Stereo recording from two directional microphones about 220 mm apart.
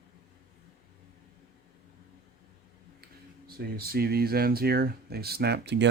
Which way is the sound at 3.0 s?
45° right (ahead or behind).